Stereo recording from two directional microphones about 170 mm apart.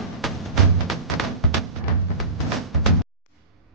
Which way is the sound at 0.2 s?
Centre (ahead or behind).